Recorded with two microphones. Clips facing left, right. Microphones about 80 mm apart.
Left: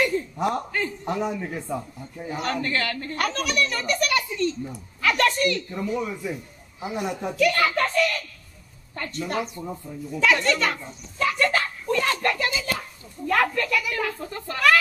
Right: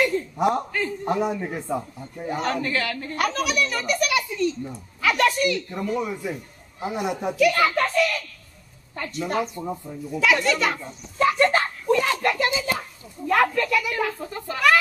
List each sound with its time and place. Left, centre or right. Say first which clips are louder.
0.4 s speech: right 5 dB; centre
2.4 s a woman's voice: even; centre
5.9 s a woman's voice: right 1 dB; centre
9.6 s speech: right 3 dB; centre
10.1 s speech: right 1 dB; centre
11.1 s a sound: right 4 dB; right
11.9 s a sound: right 2 dB; centre
12.4 s hands: right 3 dB; centre
13.3 s speech: right 2 dB; centre